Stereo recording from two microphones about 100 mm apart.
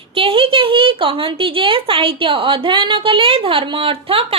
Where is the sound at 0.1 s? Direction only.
65° right (ahead or behind).